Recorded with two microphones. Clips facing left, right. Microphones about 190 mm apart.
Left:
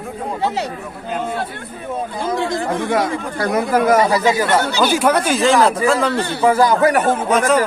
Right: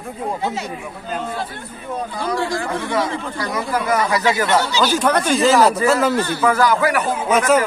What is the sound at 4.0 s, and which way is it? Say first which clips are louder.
Speech: left 3 dB; 25° left (ahead or behind).